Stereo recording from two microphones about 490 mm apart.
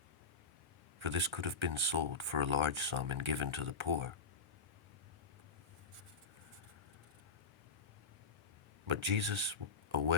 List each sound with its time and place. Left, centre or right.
0.9 s speech: right
8.9 s speech: right